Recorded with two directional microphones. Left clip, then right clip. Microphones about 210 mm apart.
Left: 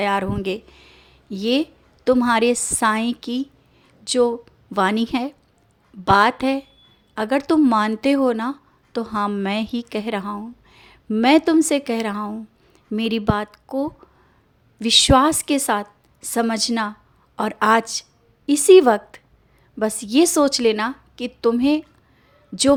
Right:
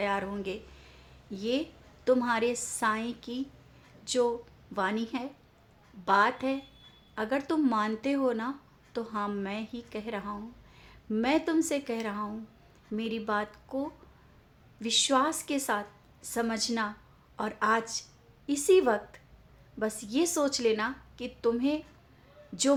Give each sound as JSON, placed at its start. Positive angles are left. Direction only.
{"t": 0.0, "sound": "speech", "side_deg": 40}